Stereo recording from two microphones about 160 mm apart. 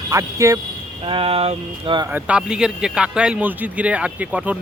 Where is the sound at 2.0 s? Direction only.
10° right (ahead or behind).